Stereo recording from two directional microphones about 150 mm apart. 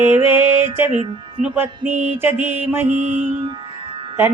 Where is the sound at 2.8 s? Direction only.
55° right (ahead or behind).